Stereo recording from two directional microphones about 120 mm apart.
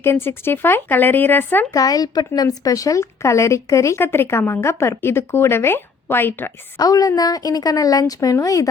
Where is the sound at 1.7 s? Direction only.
30° left (ahead or behind).